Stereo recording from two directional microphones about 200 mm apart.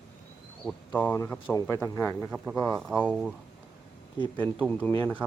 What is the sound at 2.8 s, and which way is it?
Speech, 5° right (ahead or behind).